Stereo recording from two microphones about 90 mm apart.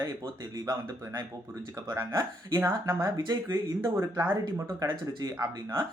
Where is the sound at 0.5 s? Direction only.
45° right (ahead or behind).